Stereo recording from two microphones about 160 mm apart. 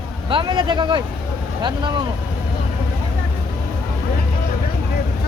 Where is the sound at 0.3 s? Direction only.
30° right (ahead or behind).